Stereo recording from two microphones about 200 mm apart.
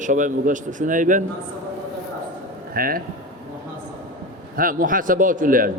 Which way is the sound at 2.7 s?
45° right (ahead or behind).